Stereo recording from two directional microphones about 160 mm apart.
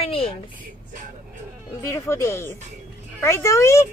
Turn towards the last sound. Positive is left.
turn(degrees=20)  # may be behind; listen again after turning